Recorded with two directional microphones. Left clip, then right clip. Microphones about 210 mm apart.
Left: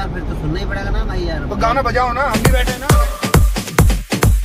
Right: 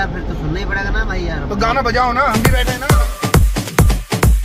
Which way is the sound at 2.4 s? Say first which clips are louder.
Right 1 dB; centre (ahead or behind).